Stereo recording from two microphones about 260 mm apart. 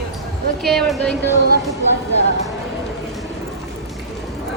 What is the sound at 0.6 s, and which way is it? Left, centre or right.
Speech, centre.